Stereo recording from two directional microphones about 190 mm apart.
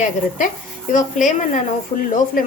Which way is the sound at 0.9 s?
40° left (ahead or behind).